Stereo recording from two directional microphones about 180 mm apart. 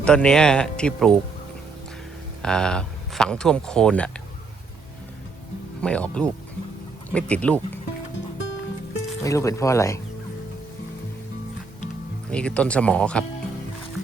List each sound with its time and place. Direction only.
0.0 s speech: 5° left (ahead or behind)
2.4 s speech: 5° left (ahead or behind)
5.8 s speech: 5° left (ahead or behind)
9.2 s speech: 15° left (ahead or behind)
12.3 s speech: 5° left (ahead or behind)